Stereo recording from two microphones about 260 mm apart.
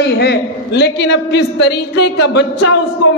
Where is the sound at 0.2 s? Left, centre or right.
Left.